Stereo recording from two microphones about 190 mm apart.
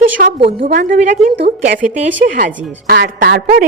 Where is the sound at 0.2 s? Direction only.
50° right (ahead or behind).